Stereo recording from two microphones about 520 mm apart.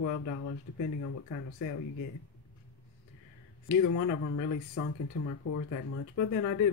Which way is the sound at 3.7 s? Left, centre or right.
Left.